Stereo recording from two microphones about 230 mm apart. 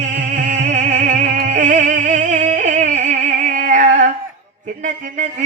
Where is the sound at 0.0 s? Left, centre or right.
Right.